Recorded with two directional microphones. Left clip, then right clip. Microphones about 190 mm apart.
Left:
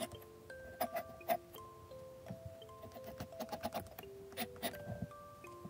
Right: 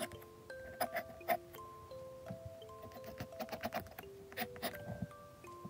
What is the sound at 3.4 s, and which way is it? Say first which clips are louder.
Clip-clop: right 1 dB; 10° right (ahead or behind).